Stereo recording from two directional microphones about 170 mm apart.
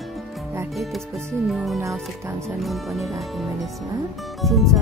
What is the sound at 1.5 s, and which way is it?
Speech, centre (ahead or behind).